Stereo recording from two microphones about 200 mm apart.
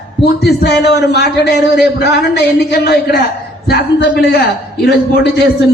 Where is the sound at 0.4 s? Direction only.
55° left (ahead or behind).